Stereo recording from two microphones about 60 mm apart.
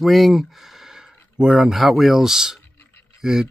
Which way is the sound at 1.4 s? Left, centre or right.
Centre.